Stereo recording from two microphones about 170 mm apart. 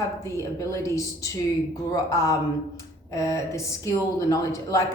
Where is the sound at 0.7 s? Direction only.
20° left (ahead or behind).